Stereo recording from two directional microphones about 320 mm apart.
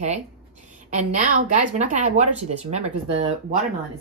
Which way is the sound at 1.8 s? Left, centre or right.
Right.